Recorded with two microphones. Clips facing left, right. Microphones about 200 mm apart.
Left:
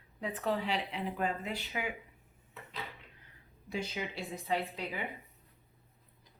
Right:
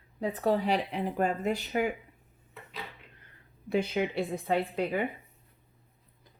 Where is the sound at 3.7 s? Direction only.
60° right (ahead or behind).